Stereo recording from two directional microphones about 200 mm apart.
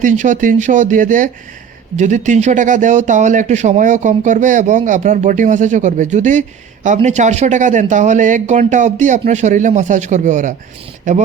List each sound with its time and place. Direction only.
0.0 s speech: 40° right (ahead or behind)